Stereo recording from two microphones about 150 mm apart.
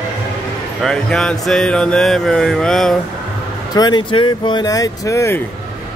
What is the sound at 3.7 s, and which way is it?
Speech, 30° left (ahead or behind).